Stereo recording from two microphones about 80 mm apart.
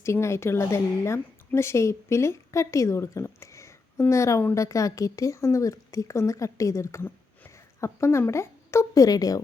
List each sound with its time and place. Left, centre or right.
0.0 s a woman's voice: left
9.0 s a woman's voice: left